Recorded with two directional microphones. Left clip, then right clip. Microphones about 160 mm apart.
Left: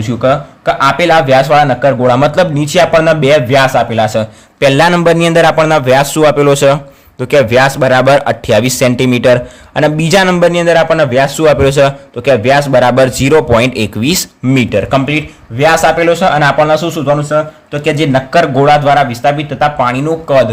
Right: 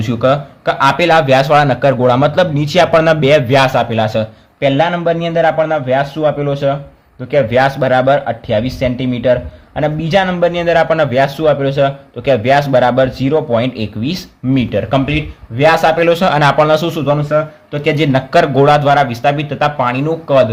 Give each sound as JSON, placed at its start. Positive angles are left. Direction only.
{"t": 0.1, "sound": "a man's voice", "side_deg": 0}
{"t": 4.6, "sound": "a man's voice", "side_deg": 50}
{"t": 7.3, "sound": "speech", "side_deg": 40}
{"t": 8.0, "sound": "a man's voice", "side_deg": 50}
{"t": 11.4, "sound": "a man's voice", "side_deg": 45}
{"t": 12.2, "sound": "a man's voice", "side_deg": 25}